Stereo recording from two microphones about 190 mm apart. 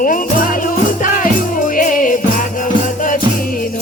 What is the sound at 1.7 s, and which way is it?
Music, 45° left (ahead or behind).